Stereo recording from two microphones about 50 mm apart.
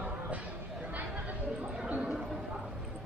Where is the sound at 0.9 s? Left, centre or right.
Right.